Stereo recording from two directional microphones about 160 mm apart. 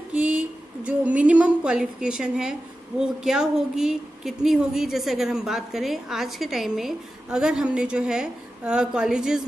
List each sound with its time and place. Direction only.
0.1 s a woman's voice: 5° right (ahead or behind)